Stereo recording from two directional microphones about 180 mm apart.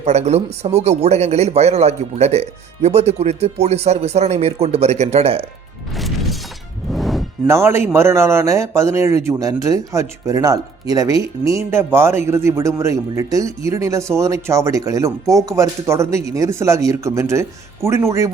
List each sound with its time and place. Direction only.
0.0 s speech: 40° right (ahead or behind)
5.9 s music: centre (ahead or behind)
7.4 s a man's voice: 15° right (ahead or behind)